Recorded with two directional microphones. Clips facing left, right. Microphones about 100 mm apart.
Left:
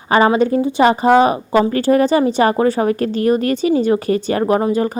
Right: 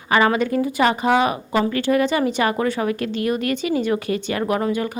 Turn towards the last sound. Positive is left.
turn(degrees=35)  # may be behind; listen again after turning